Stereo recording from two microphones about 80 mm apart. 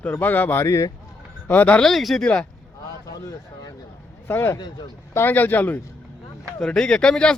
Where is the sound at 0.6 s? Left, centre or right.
Left.